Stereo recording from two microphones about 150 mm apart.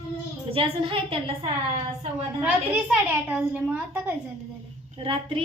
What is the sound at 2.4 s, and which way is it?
A child's voice, 10° right (ahead or behind).